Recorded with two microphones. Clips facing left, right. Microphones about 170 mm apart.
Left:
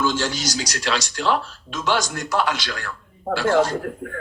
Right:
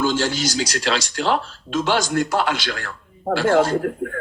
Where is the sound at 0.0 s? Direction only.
30° right (ahead or behind).